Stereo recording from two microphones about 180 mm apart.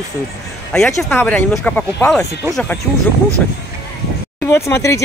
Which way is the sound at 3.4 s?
5° left (ahead or behind).